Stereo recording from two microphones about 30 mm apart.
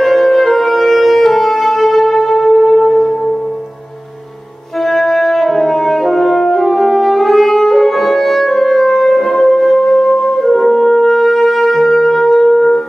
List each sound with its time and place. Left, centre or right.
0.0 s music: centre
4.8 s french horn: centre
11.8 s wind instrument: centre